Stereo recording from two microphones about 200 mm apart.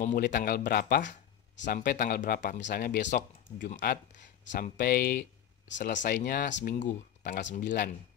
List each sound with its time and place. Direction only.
0.0 s speech: 45° left (ahead or behind)
2.6 s speech: 50° left (ahead or behind)